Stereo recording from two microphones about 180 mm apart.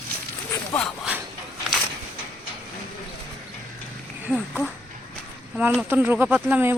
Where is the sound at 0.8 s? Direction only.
5° left (ahead or behind).